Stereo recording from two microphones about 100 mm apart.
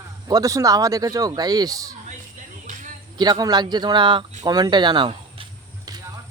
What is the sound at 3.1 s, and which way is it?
Speech, 45° right (ahead or behind).